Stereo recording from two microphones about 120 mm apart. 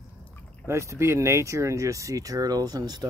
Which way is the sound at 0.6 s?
25° right (ahead or behind).